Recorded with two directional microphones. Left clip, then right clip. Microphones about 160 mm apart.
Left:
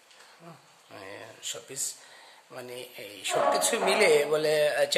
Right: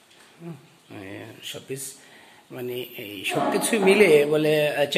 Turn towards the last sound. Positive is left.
turn(degrees=20)  # may be behind; listen again after turning